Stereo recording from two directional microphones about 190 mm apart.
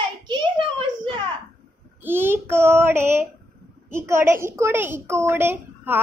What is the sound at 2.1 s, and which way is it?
Child singing, 10° right (ahead or behind).